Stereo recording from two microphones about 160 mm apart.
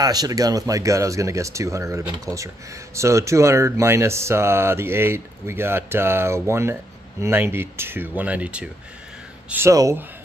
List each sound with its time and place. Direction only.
0.0 s speech: 25° right (ahead or behind)